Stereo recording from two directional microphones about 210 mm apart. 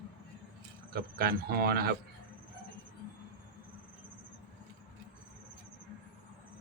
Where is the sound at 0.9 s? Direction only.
45° right (ahead or behind).